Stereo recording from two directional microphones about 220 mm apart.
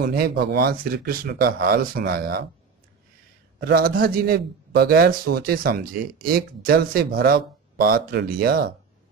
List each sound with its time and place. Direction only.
0.0 s a man's voice: 45° right (ahead or behind)
3.6 s a man's voice: 45° right (ahead or behind)